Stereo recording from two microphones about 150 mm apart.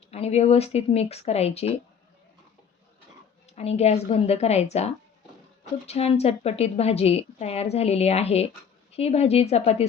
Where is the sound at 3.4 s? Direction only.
45° left (ahead or behind).